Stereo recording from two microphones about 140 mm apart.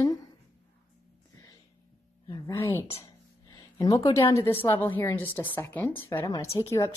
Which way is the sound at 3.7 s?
20° left (ahead or behind).